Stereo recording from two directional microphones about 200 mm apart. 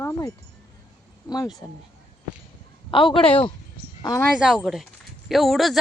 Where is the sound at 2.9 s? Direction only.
25° left (ahead or behind).